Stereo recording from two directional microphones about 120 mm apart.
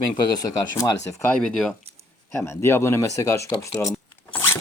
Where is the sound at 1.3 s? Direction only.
5° left (ahead or behind).